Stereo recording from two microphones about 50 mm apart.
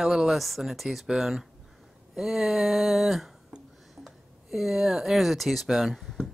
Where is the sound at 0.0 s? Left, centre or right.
Centre.